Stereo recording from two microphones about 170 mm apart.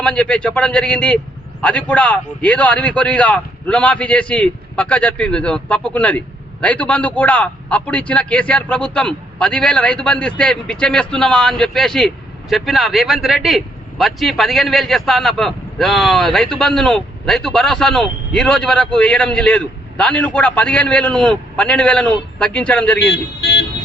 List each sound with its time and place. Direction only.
0.0 s a man's voice: 5° left (ahead or behind)
23.0 s speech: 90° left